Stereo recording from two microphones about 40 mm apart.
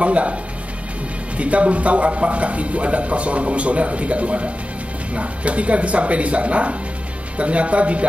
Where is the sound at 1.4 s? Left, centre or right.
Right.